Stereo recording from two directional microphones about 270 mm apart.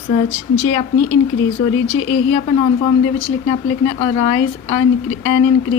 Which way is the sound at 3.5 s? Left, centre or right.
Left.